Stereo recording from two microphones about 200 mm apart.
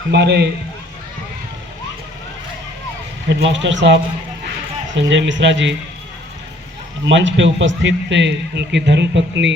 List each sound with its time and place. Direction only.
0.1 s a man's voice: 55° right (ahead or behind)
3.2 s a man's voice: 60° right (ahead or behind)
7.0 s a man's voice: 65° right (ahead or behind)